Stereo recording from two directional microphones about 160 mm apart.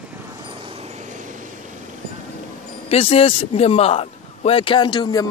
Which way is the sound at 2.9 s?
35° left (ahead or behind).